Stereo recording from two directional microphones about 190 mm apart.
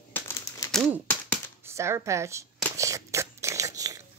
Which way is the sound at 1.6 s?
15° right (ahead or behind).